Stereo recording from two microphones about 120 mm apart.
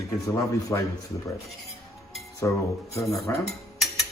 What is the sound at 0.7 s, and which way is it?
Speech, 30° left (ahead or behind).